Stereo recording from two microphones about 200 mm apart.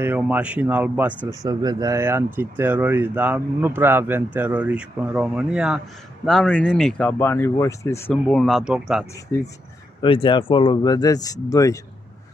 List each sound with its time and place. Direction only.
0.0 s speech: 10° right (ahead or behind)
1.4 s speech: 20° right (ahead or behind); by 9.0 s 5° right (ahead or behind)
9.3 s speech: 15° left (ahead or behind)
10.0 s speech: 25° left (ahead or behind)